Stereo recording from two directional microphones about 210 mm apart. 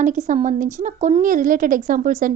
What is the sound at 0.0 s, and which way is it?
A woman's voice, 35° right (ahead or behind).